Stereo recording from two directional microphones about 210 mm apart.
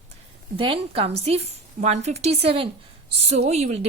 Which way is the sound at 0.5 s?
25° right (ahead or behind).